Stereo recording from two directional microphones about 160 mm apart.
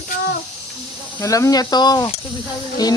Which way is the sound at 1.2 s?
20° left (ahead or behind).